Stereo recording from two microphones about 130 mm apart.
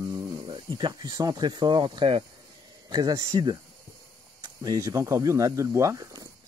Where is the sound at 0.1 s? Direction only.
35° right (ahead or behind).